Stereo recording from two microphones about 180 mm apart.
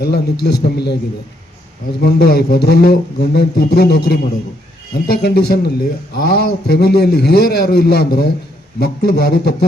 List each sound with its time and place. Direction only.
0.0 s a man's voice: 65° left (ahead or behind)
2.0 s a man's voice: 65° left (ahead or behind)